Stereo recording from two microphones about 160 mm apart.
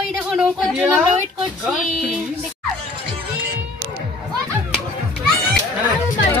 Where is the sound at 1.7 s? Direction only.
5° right (ahead or behind).